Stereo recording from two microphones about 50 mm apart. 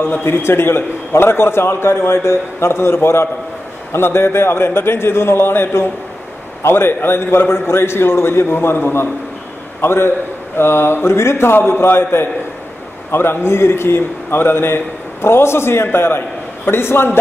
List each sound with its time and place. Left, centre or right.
0.0 s a man's voice: left